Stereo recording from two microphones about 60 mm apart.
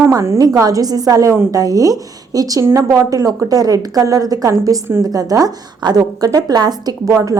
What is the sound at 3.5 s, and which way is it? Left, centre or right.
A woman's voice, right.